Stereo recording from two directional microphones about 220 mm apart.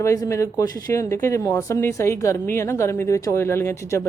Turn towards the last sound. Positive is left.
turn(degrees=10)  # may be behind; listen again after turning